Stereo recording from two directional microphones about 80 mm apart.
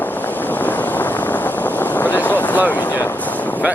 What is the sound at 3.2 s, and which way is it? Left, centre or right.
Boat, centre.